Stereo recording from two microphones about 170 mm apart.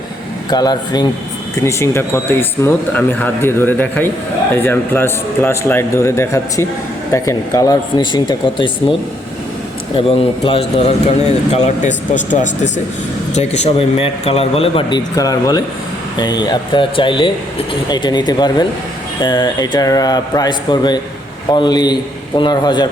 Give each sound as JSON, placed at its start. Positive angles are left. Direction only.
{"t": 0.5, "sound": "speech", "side_deg": 25}
{"t": 9.9, "sound": "speech", "side_deg": 30}